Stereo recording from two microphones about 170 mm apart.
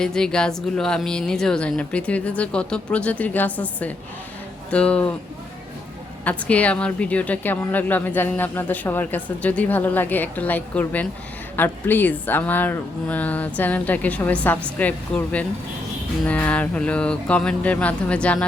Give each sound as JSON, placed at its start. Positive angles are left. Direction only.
{"t": 0.0, "sound": "a woman's voice", "side_deg": 5}
{"t": 6.2, "sound": "a woman's voice", "side_deg": 10}